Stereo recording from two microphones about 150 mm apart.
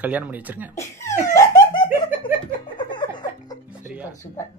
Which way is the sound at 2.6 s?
30° left (ahead or behind).